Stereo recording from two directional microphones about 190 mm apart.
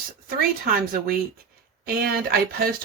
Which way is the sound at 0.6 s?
50° right (ahead or behind).